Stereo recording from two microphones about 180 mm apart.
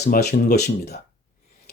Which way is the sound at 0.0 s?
65° left (ahead or behind).